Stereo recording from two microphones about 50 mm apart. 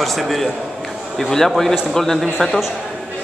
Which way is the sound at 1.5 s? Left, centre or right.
Centre.